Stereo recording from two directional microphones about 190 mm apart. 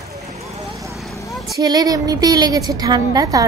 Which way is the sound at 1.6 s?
20° right (ahead or behind).